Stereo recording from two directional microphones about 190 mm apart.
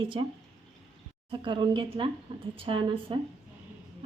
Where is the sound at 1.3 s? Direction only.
25° right (ahead or behind).